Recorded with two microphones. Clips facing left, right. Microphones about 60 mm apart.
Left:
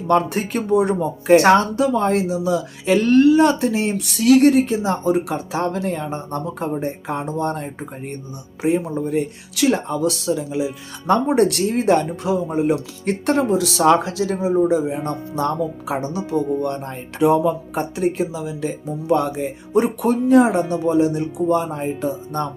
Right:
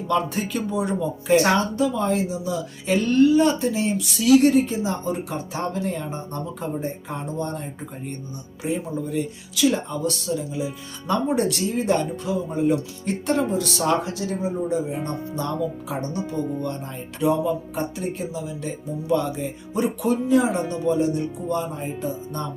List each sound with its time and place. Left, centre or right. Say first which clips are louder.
0.1 s speech: left 5 dB; left
11.1 s speech: left 6 dB; left
15.4 s speech: left 5 dB; left